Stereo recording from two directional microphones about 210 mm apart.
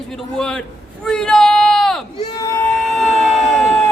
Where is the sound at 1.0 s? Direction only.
5° left (ahead or behind).